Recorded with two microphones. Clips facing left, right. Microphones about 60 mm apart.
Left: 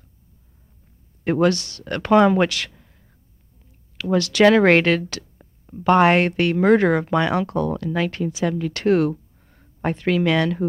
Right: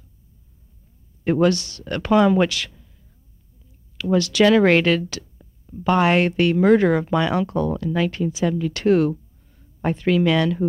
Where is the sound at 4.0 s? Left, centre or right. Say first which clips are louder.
Left 1 dB; left.